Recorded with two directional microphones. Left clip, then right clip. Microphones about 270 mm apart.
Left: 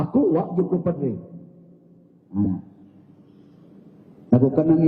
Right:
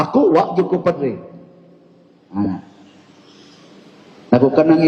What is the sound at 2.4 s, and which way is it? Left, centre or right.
Speech, centre.